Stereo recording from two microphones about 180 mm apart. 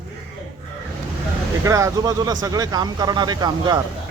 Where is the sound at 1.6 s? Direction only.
15° right (ahead or behind).